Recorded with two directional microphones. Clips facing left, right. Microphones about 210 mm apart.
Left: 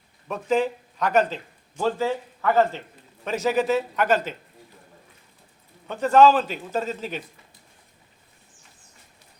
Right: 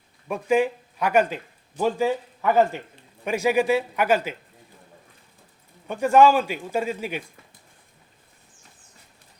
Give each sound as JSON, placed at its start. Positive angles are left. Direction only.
{"t": 0.3, "sound": "a man's voice", "side_deg": -10}
{"t": 5.9, "sound": "a man's voice", "side_deg": -10}